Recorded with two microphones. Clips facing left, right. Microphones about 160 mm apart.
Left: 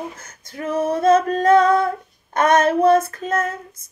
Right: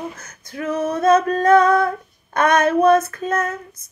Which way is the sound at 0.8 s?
25° left (ahead or behind).